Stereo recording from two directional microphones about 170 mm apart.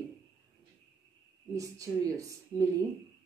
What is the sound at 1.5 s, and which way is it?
Speech, 20° right (ahead or behind).